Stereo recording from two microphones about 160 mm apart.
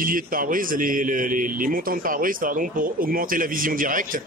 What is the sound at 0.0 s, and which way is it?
Speech, 60° right (ahead or behind).